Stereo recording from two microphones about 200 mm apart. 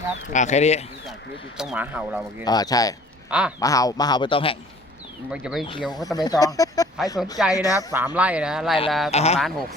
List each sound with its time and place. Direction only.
0.3 s speech: 35° left (ahead or behind)
1.5 s speech: 5° right (ahead or behind)
2.4 s speech: 20° left (ahead or behind)
3.2 s speech: 5° right (ahead or behind)
3.6 s speech: 15° left (ahead or behind)
5.3 s speech: 5° right (ahead or behind)
5.9 s speech: 20° left (ahead or behind)
7.9 s speech: 10° right (ahead or behind)
9.1 s speech: 30° left (ahead or behind)